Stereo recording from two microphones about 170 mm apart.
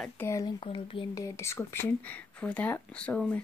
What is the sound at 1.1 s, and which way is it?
Speech, 20° left (ahead or behind).